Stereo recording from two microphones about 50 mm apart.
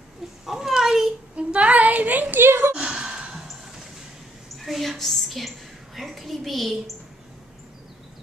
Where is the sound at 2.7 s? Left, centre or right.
Centre.